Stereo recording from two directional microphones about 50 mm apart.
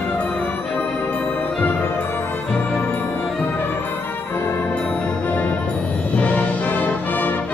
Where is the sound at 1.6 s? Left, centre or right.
Left.